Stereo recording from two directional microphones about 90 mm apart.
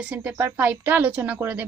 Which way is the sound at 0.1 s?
20° right (ahead or behind).